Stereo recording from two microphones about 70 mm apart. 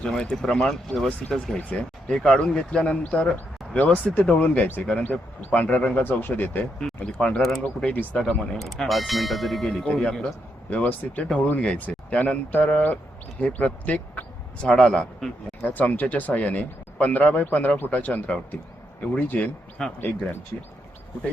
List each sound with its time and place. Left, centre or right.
0.0 s speech: centre; by 6.7 s left
7.0 s speech: centre
10.7 s speech: left
15.6 s speech: left